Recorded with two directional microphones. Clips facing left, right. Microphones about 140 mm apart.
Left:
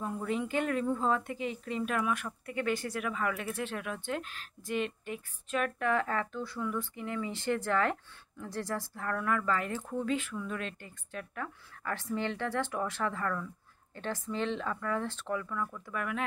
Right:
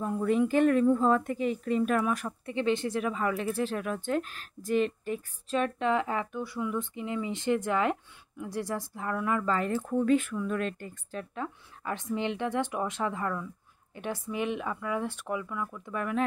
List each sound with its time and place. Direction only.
0.0 s speech: 50° right (ahead or behind)
2.4 s speech: 25° right (ahead or behind)
5.8 s speech: 20° right (ahead or behind)
9.6 s speech: 35° right (ahead or behind)
9.8 s speech: 50° right (ahead or behind)
11.3 s speech: 20° right (ahead or behind)
15.9 s speech: 30° right (ahead or behind)